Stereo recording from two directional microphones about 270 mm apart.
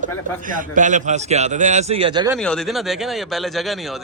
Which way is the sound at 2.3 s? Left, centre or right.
Centre.